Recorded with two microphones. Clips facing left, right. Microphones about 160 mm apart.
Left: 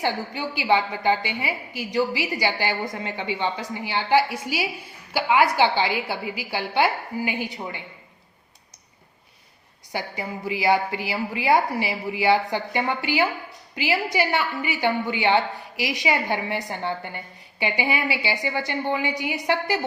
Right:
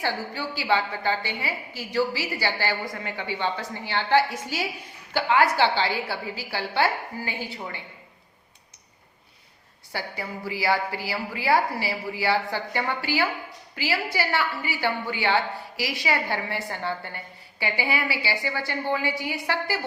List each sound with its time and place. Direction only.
0.0 s a woman's voice: 15° left (ahead or behind)
9.9 s a woman's voice: 20° left (ahead or behind)